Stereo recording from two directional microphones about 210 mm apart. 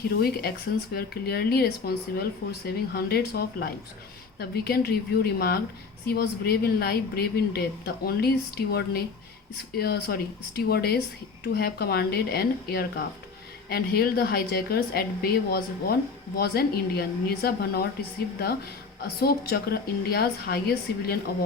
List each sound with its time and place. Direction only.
0.1 s speech: 50° left (ahead or behind)
19.0 s speech: 45° left (ahead or behind)